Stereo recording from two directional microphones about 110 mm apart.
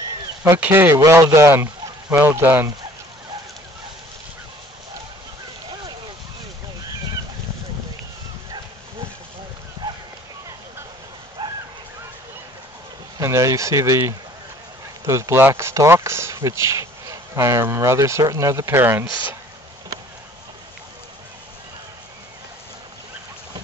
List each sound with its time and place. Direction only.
0.6 s speech: 20° right (ahead or behind)
0.9 s speech: 30° right (ahead or behind)
9.8 s a sound: 35° right (ahead or behind)
11.4 s bow-wow: 40° right (ahead or behind)
13.2 s speech: 30° right (ahead or behind)